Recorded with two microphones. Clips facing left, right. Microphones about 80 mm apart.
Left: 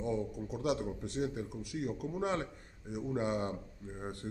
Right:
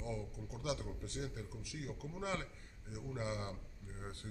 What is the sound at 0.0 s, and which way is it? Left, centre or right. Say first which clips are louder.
A man's voice: left 9 dB; left.